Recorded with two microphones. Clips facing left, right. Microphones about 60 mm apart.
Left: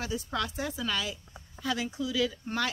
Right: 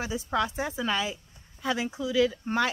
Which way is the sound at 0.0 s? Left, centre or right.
Right.